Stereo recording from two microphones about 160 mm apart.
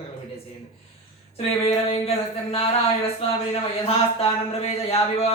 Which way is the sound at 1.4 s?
40° left (ahead or behind).